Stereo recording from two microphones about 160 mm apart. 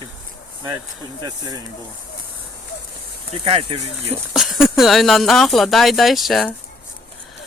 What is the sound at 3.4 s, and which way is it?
Speech, 35° right (ahead or behind).